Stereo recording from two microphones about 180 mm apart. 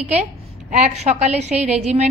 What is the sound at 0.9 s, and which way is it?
A woman's voice, 40° right (ahead or behind).